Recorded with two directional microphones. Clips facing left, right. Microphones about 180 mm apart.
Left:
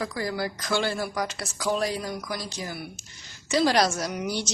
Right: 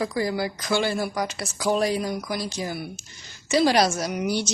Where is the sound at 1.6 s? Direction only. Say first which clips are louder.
Right 4 dB; 25° right (ahead or behind).